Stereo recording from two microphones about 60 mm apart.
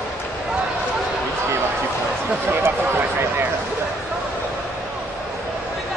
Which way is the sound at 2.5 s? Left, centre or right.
Right.